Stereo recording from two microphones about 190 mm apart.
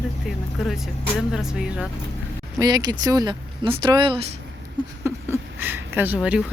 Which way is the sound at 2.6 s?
20° right (ahead or behind).